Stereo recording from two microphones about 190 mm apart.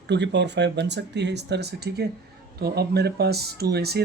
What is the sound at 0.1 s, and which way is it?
Speech, 65° right (ahead or behind).